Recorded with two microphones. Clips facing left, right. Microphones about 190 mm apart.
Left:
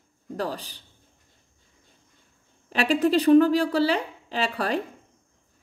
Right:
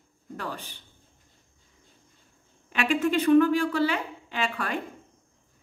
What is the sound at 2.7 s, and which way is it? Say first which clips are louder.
Speech: left 3 dB; 35° left (ahead or behind).